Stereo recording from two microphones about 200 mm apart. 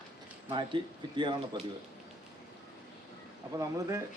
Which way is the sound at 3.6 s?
15° right (ahead or behind).